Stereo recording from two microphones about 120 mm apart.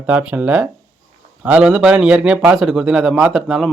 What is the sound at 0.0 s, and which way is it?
Speech, 10° right (ahead or behind).